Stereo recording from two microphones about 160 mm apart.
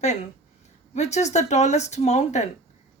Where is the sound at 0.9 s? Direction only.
45° left (ahead or behind).